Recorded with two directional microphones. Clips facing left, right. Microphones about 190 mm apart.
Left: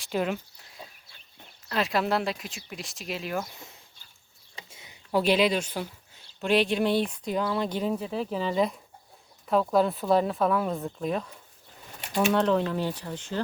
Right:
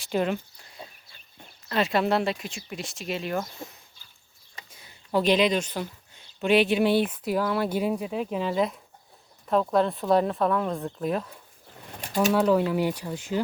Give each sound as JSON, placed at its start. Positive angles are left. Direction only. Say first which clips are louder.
{"t": 0.0, "sound": "speech", "louder": "right 2 dB", "side_deg": 0}
{"t": 4.7, "sound": "a sound", "louder": "left 1 dB", "side_deg": 20}
{"t": 5.1, "sound": "speech", "louder": "right 1 dB", "side_deg": 10}